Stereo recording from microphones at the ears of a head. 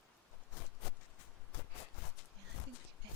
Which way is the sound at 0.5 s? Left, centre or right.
Left.